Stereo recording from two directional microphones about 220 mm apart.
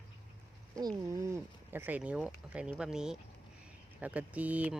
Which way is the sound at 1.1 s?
15° right (ahead or behind).